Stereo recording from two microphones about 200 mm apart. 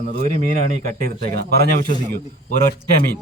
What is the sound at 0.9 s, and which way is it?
A man's voice, 45° right (ahead or behind).